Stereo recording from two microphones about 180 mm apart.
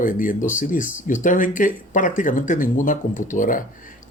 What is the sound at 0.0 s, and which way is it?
Speech, 50° left (ahead or behind).